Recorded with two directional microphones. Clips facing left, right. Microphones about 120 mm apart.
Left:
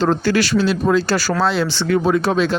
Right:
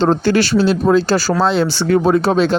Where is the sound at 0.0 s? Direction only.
30° right (ahead or behind).